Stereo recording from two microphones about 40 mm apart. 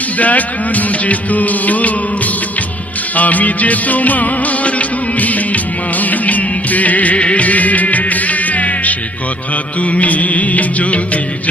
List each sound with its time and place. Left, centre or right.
0.2 s music: left